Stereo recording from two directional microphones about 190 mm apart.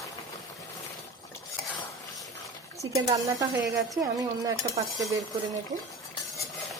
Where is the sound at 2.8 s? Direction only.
20° right (ahead or behind).